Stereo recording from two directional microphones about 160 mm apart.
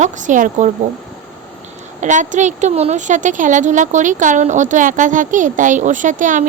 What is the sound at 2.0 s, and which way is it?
A woman's voice, 50° right (ahead or behind).